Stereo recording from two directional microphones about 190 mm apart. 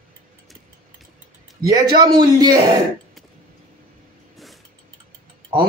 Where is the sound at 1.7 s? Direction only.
20° right (ahead or behind).